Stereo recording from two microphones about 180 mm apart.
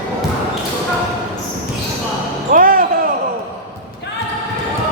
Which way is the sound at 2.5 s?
50° right (ahead or behind).